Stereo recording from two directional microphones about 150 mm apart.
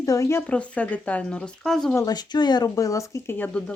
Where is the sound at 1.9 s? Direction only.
25° left (ahead or behind); by 3.7 s 10° left (ahead or behind).